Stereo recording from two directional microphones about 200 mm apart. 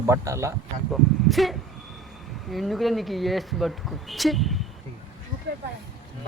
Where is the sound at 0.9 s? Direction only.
Centre (ahead or behind).